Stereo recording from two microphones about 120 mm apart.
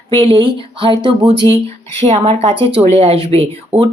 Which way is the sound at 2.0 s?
65° right (ahead or behind).